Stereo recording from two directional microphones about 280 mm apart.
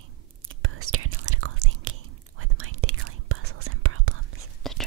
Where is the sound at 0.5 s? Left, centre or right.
Right.